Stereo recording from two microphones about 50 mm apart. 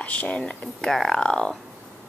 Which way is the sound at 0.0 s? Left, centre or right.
Left.